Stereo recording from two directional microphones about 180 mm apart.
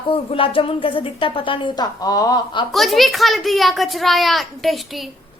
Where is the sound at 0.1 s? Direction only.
30° left (ahead or behind).